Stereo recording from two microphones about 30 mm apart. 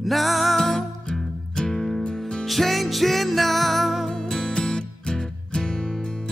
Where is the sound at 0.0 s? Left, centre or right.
Centre.